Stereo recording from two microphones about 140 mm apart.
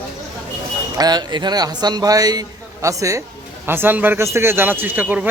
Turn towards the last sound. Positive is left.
turn(degrees=-10)  # may be behind; listen again after turning